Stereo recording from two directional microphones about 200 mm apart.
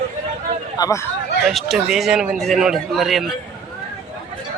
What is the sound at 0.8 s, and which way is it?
Speech, 20° left (ahead or behind).